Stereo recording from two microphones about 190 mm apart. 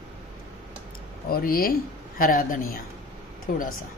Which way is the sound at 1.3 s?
50° left (ahead or behind).